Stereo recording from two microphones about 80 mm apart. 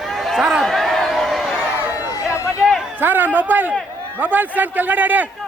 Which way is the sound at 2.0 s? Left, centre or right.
Left.